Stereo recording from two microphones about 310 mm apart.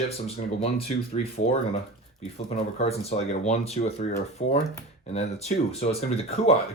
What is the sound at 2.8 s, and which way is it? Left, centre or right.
Speech, centre.